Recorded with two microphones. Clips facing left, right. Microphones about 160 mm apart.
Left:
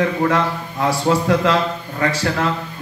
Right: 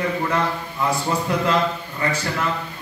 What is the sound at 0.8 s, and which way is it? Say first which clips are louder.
A man's voice: left 5 dB; 85° left.